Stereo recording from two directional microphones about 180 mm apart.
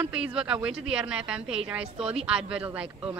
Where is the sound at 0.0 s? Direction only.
5° right (ahead or behind).